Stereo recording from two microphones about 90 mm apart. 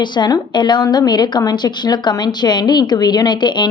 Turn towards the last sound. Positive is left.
turn(degrees=55)  # may be behind; listen again after turning